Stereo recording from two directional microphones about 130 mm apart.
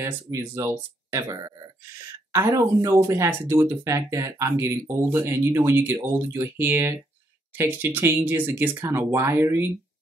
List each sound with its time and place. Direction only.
0.0 s speech: 20° right (ahead or behind)